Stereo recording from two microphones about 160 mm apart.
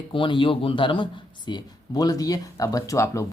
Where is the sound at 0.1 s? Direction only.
30° left (ahead or behind).